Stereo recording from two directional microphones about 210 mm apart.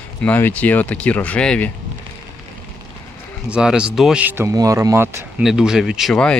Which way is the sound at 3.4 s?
5° right (ahead or behind).